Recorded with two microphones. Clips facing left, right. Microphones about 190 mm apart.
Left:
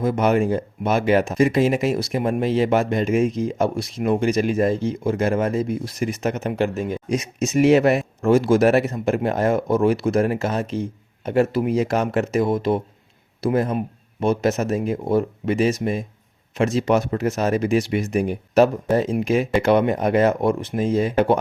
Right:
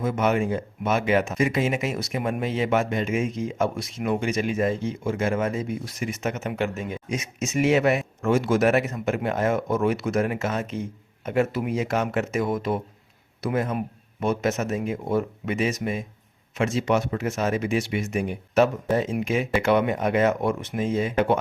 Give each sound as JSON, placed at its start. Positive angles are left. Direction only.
{"t": 0.0, "sound": "speech", "side_deg": 35}